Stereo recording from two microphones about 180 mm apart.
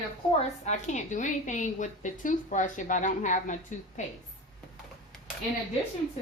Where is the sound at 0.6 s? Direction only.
40° left (ahead or behind).